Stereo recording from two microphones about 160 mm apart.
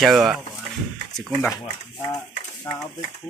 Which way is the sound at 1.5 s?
25° left (ahead or behind).